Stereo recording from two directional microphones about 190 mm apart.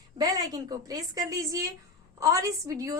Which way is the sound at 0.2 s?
20° right (ahead or behind).